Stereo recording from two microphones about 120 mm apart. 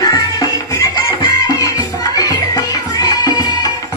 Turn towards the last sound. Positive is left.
turn(degrees=35)  # may be behind; listen again after turning